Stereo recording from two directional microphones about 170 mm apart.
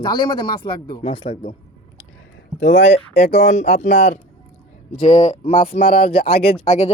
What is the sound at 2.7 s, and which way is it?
A woman's voice, 40° left (ahead or behind).